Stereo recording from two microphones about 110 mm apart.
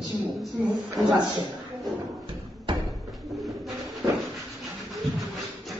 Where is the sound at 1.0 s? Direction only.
5° left (ahead or behind).